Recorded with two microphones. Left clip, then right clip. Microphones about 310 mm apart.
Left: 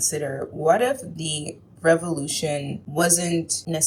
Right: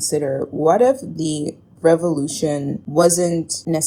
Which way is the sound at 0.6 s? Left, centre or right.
Right.